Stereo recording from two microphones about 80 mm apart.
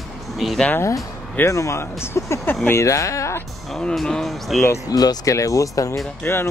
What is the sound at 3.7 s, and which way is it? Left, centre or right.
Speech, centre.